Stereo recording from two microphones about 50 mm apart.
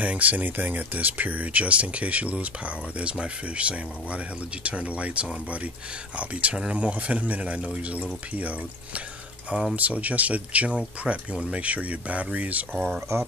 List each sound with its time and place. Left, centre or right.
0.0 s speech: right
13.1 s speech: right